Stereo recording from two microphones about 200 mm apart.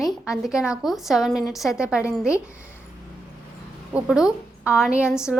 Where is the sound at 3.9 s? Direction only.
5° right (ahead or behind).